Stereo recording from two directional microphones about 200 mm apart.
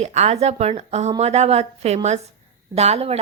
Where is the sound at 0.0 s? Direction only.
35° right (ahead or behind).